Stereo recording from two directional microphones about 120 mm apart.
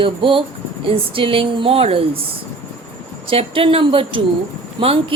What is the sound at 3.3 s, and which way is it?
Speech, 50° right (ahead or behind).